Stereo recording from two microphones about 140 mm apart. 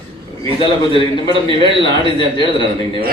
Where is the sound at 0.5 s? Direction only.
35° left (ahead or behind).